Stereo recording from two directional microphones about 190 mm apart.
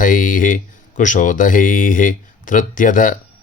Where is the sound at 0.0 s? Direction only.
45° left (ahead or behind).